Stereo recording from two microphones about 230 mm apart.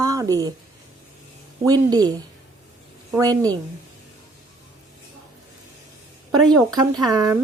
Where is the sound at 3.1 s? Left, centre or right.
Centre.